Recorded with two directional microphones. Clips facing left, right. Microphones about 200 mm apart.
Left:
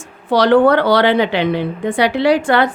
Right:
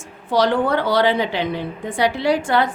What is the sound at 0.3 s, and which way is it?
A woman's voice, 70° left (ahead or behind).